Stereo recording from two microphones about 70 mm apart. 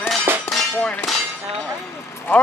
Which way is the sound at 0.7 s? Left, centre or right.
Centre.